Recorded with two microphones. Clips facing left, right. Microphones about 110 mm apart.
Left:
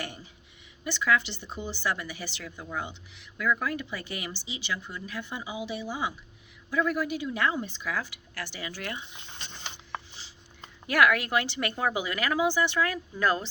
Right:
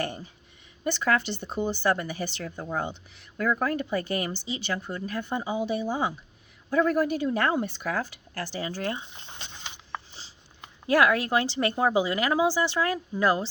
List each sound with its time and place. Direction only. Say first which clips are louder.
0.9 s speech: right 2 dB; 45° right (ahead or behind)
10.8 s speech: right 2 dB; 30° right (ahead or behind)